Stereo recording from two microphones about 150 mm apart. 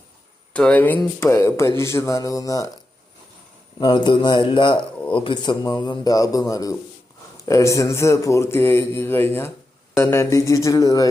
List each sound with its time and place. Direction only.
0.5 s a man's voice: 10° left (ahead or behind)
3.8 s a man's voice: 30° left (ahead or behind)